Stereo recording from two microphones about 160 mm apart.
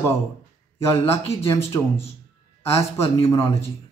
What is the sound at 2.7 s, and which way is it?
Speech, 15° left (ahead or behind).